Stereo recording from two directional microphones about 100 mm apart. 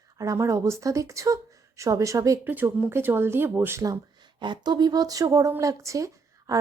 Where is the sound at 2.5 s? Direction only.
20° right (ahead or behind).